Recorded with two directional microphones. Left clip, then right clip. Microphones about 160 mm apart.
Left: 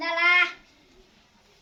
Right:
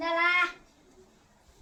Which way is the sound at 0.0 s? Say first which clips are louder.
Left 4 dB; 45° right (ahead or behind).